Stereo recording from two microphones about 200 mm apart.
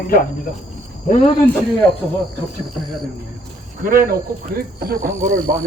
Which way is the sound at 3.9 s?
50° right (ahead or behind).